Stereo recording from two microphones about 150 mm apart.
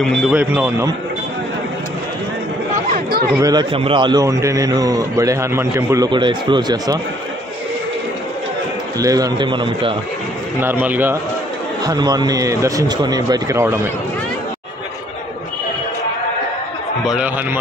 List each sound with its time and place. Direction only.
0.0 s speech: centre (ahead or behind)
2.9 s speech: 90° right
3.3 s a man's voice: 25° right (ahead or behind)
3.7 s a man's voice: 35° right (ahead or behind); by 6.0 s 20° right (ahead or behind)
6.0 s speech: 30° right (ahead or behind)
9.0 s speech: 25° right (ahead or behind)
10.6 s speech: 15° right (ahead or behind)
11.8 s a man's voice: 25° right (ahead or behind)
17.0 s a man's voice: 5° right (ahead or behind)